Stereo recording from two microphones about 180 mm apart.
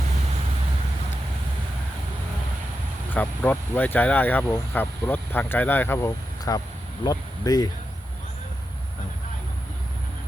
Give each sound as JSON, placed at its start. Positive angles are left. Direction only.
{"t": 3.1, "sound": "speech", "side_deg": 10}